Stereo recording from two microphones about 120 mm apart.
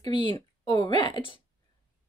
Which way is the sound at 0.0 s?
40° left (ahead or behind).